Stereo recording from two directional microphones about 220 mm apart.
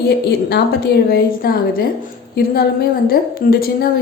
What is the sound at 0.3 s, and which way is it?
A woman's voice, 45° left (ahead or behind).